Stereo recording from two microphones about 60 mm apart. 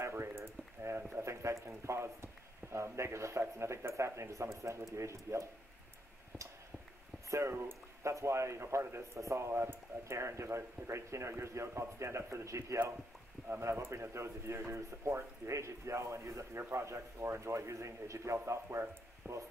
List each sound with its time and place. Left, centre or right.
0.0 s a sound: right
1.2 s a man's voice: right
7.2 s speech: right
8.0 s a man's voice: right